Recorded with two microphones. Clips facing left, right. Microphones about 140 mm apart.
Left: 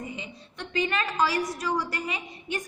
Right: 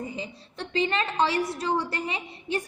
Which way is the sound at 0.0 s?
35° right (ahead or behind).